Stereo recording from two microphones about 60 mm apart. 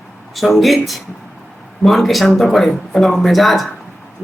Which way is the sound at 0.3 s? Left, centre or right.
Centre.